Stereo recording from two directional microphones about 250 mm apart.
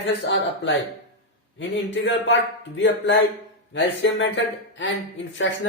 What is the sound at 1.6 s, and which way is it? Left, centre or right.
Speech, left.